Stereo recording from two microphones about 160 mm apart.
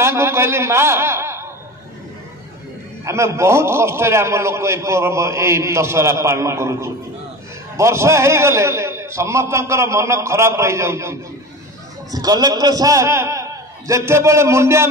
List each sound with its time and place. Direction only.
0.0 s a man's voice: 15° right (ahead or behind)
3.1 s a man's voice: 15° right (ahead or behind)